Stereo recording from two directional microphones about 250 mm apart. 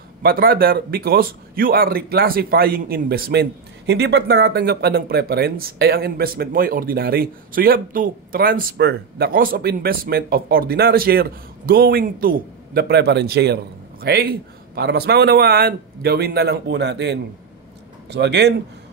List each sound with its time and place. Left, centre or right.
0.2 s a man's voice: right